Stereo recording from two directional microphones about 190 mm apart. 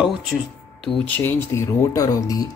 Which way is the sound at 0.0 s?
Centre (ahead or behind).